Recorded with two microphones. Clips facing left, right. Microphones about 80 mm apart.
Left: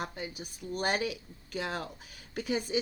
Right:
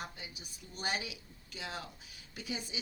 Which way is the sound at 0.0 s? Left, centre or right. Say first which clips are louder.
Left 8 dB; left.